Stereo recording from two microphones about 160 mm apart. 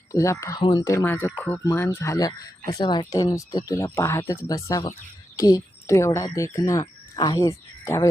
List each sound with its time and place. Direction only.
0.1 s speech: 20° left (ahead or behind)